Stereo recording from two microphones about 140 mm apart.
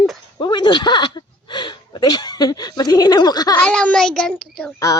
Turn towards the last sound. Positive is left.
turn(degrees=5)  # may be behind; listen again after turning